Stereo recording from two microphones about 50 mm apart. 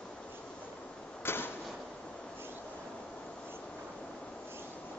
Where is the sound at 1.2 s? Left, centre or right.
Left.